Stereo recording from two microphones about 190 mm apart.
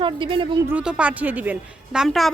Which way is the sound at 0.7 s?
5° right (ahead or behind).